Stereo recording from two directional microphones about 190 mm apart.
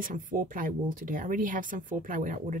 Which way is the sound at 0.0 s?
45° right (ahead or behind).